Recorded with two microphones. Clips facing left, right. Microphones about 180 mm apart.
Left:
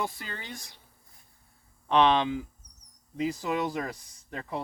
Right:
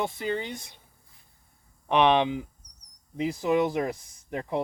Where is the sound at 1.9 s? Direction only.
15° right (ahead or behind).